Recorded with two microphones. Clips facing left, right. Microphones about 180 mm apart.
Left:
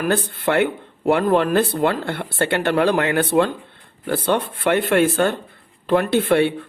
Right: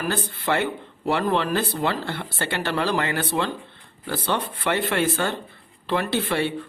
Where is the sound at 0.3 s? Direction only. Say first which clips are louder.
Left 5 dB; 60° left (ahead or behind).